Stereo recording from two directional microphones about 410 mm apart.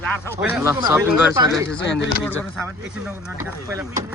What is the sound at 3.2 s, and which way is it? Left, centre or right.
Speech, centre.